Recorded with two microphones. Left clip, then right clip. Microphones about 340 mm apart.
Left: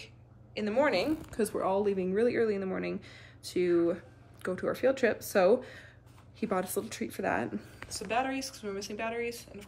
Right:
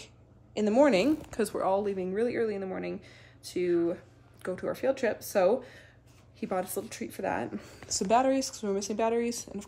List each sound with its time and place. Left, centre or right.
0.6 s speech: centre
1.4 s speech: centre
8.1 s speech: centre